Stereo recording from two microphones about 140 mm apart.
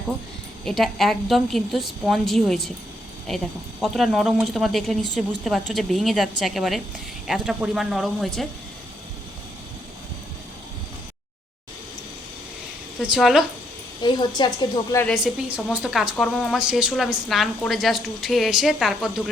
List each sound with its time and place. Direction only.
0.6 s speech: centre (ahead or behind)
13.0 s speech: 5° right (ahead or behind)
14.0 s a woman's voice: 30° left (ahead or behind)
15.0 s speech: centre (ahead or behind)